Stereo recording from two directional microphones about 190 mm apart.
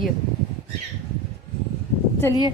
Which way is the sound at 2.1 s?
15° left (ahead or behind).